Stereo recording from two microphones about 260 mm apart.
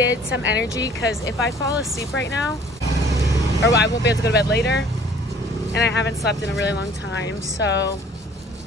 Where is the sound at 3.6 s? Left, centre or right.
Left.